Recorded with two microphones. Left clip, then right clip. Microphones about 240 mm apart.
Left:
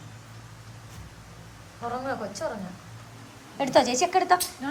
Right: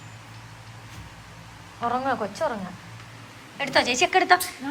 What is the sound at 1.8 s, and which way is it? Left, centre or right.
Speech, centre.